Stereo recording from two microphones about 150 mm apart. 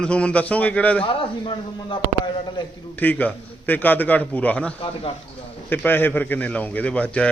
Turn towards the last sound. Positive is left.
turn(degrees=10)  # may be behind; listen again after turning